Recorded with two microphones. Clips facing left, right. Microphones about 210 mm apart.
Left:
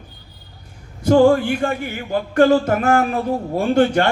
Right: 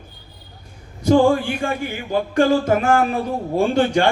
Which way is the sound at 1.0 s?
50° left (ahead or behind).